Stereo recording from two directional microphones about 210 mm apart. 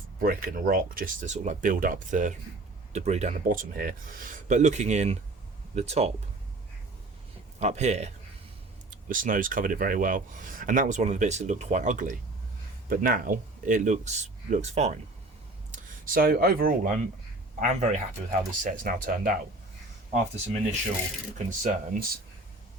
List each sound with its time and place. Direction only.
0.2 s speech: 40° right (ahead or behind)
7.6 s speech: 30° right (ahead or behind)
15.7 s speech: 45° right (ahead or behind)
21.3 s speech: 35° right (ahead or behind)